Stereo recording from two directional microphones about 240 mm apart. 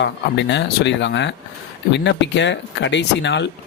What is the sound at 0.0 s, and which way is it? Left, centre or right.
A man's voice, left.